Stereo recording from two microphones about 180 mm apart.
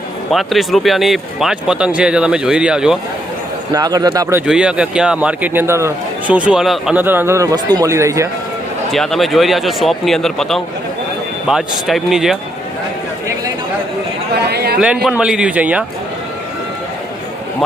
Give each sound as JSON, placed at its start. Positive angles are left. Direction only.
{"t": 0.3, "sound": "speech", "side_deg": 0}
{"t": 3.7, "sound": "speech", "side_deg": -20}
{"t": 4.4, "sound": "a man's voice", "side_deg": -5}
{"t": 8.9, "sound": "speech", "side_deg": 0}
{"t": 14.5, "sound": "a sound", "side_deg": -65}
{"t": 14.8, "sound": "a man's voice", "side_deg": -5}